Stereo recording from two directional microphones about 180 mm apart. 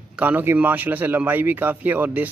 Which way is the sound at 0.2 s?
10° right (ahead or behind).